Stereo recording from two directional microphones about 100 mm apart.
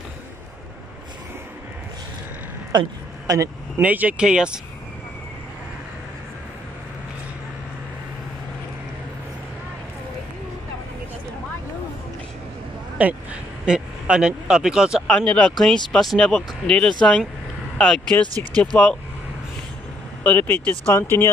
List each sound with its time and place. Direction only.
2.7 s a woman's voice: 50° right (ahead or behind)
3.3 s speech: 35° right (ahead or behind)
3.8 s speech: 15° right (ahead or behind)
12.9 s speech: 15° right (ahead or behind)
15.0 s speech: 10° left (ahead or behind)
17.7 s vehicle: 10° left (ahead or behind)
18.6 s speech: 10° left (ahead or behind)
20.2 s speech: 20° left (ahead or behind)